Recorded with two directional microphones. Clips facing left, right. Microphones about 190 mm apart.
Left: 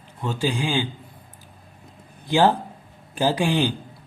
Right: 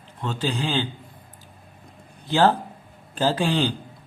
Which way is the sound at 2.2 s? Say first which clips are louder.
Left 1 dB; 15° left (ahead or behind).